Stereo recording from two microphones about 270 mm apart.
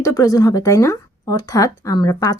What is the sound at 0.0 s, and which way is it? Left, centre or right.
Speech, centre.